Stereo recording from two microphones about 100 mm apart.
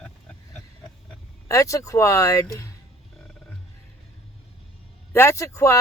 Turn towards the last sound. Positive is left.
turn(degrees=30)  # may be behind; listen again after turning